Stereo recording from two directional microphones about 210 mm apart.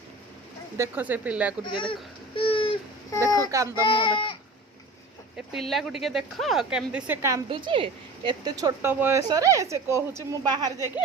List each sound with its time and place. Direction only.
0.8 s a woman's voice: 10° right (ahead or behind)
1.6 s baby cry: 25° left (ahead or behind)
3.3 s child singing: 15° right (ahead or behind)
3.8 s speech: 25° left (ahead or behind)
5.5 s a woman's voice: centre (ahead or behind)
7.5 s a woman's voice: 25° right (ahead or behind)